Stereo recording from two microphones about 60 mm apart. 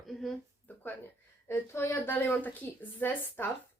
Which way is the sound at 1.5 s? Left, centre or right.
Left.